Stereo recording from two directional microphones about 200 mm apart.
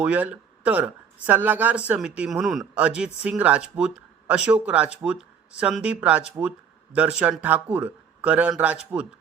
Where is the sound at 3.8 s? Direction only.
5° right (ahead or behind).